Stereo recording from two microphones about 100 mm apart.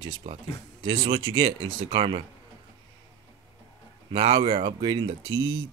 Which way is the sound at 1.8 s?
75° right (ahead or behind).